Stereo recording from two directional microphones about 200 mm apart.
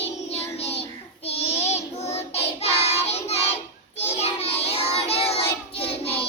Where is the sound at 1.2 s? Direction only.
30° left (ahead or behind).